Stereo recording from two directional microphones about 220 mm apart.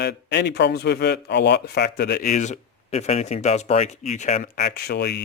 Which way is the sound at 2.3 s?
35° left (ahead or behind).